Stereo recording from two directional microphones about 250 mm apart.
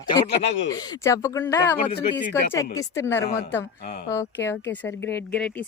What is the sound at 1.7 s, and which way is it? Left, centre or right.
Speech, left.